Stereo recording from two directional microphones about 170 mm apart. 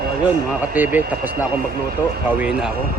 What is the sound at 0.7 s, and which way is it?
Speech, 10° right (ahead or behind).